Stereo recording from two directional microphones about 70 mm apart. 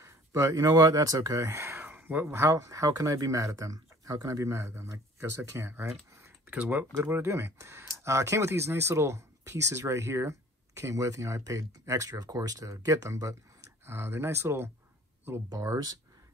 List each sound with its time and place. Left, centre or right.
0.0 s speech: right
1.6 s a sound: right
2.2 s speech: right
6.5 s speech: right
7.1 s speech: right
13.8 s speech: right